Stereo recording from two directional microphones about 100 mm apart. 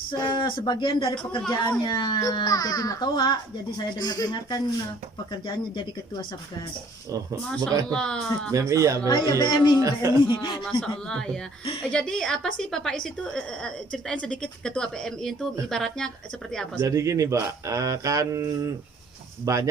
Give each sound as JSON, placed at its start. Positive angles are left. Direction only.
{"t": 0.1, "sound": "speech", "side_deg": 55}
{"t": 7.9, "sound": "a woman's voice", "side_deg": 10}
{"t": 8.5, "sound": "speech", "side_deg": -30}
{"t": 9.0, "sound": "speech", "side_deg": 40}
{"t": 10.6, "sound": "a woman's voice", "side_deg": 10}
{"t": 16.8, "sound": "speech", "side_deg": -35}